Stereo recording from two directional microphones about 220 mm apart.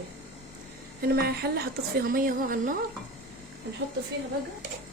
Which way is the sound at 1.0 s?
45° right (ahead or behind).